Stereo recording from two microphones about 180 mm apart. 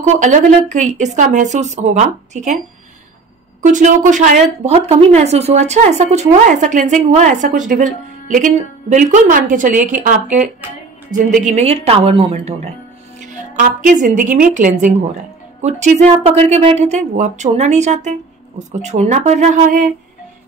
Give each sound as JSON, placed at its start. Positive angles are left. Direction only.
{"t": 0.0, "sound": "speech", "side_deg": -40}
{"t": 3.6, "sound": "a woman's voice", "side_deg": -45}
{"t": 13.2, "sound": "a woman's voice", "side_deg": -45}